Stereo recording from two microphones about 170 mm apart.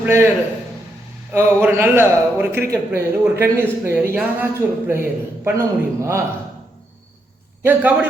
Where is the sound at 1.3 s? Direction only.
15° right (ahead or behind).